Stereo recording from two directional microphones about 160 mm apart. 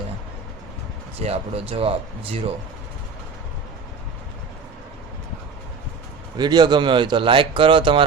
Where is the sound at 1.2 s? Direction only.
40° right (ahead or behind).